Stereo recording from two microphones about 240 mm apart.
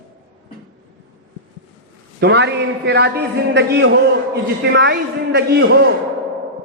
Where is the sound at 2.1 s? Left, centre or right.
Right.